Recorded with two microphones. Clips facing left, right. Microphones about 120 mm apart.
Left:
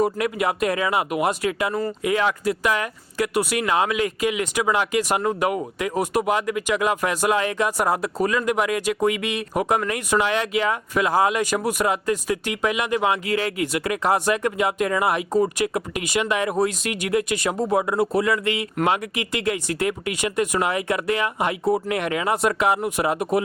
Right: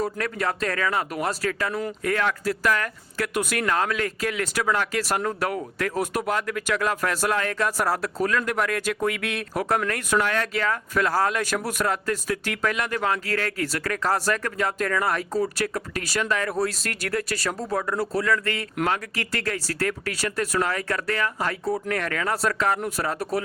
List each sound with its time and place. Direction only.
0.2 s speech: 15° left (ahead or behind)